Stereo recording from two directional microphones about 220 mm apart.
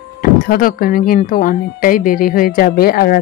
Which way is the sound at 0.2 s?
40° left (ahead or behind).